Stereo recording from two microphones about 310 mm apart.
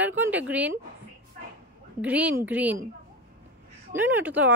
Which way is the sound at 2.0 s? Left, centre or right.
Centre.